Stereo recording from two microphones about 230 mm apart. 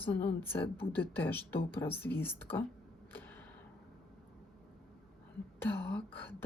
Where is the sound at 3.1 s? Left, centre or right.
Centre.